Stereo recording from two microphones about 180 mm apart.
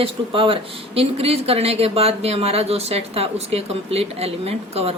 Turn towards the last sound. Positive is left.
turn(degrees=-35)  # may be behind; listen again after turning